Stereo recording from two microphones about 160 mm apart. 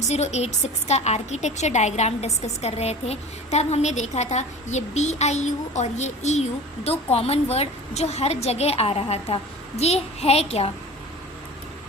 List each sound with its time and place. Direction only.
0.1 s a woman's voice: 45° left (ahead or behind)